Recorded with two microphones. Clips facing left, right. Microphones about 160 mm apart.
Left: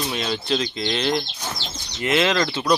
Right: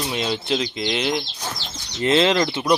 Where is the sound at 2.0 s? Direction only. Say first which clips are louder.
Right 3 dB; 25° right (ahead or behind).